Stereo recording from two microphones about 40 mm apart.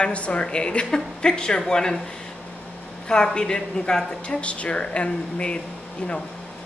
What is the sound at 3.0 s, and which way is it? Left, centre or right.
Speech, centre.